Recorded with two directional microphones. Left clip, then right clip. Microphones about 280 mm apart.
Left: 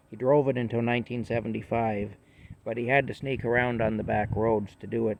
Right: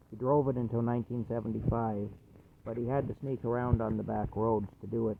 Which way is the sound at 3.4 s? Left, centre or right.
Left.